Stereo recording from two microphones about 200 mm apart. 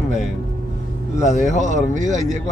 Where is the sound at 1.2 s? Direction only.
35° left (ahead or behind).